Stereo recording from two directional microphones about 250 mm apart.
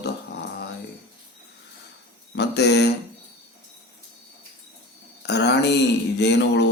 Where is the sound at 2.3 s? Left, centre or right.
Left.